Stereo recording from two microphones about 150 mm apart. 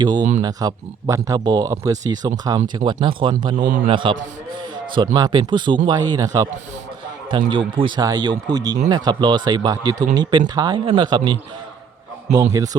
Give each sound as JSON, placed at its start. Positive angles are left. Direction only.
{"t": 0.0, "sound": "speech", "side_deg": -30}
{"t": 3.5, "sound": "a man's voice", "side_deg": -60}
{"t": 3.8, "sound": "speech", "side_deg": -35}